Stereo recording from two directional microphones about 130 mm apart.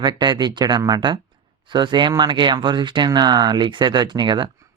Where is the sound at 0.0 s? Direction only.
35° right (ahead or behind).